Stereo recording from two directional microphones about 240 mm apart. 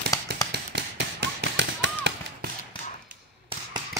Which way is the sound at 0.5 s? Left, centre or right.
Right.